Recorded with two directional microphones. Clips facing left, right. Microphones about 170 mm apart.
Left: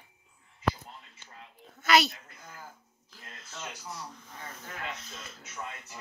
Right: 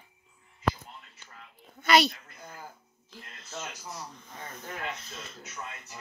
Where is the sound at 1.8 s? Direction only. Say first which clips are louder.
Right 2 dB; centre (ahead or behind).